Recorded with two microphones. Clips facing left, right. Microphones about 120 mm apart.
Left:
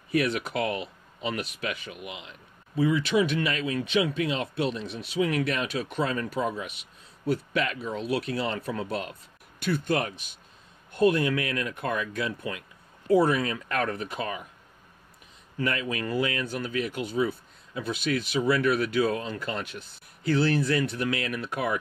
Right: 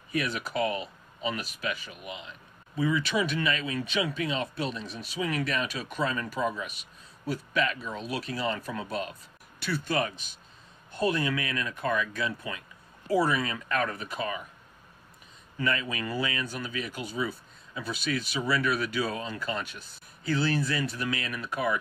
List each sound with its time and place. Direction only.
0.1 s speech: 70° left (ahead or behind)
2.0 s speech: 90° left
2.8 s speech: 65° left (ahead or behind)
15.5 s speech: 65° left (ahead or behind)